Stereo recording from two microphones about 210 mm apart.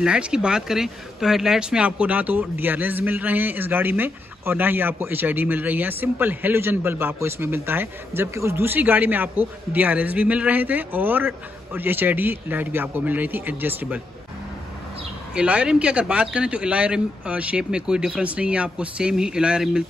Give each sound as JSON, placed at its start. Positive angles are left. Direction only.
{"t": 0.0, "sound": "a man's voice", "side_deg": -5}
{"t": 15.3, "sound": "a man's voice", "side_deg": -5}